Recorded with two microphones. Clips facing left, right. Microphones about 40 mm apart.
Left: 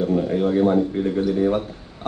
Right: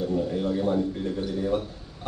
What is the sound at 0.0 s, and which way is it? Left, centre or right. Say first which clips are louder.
A man's voice: left 6 dB; left.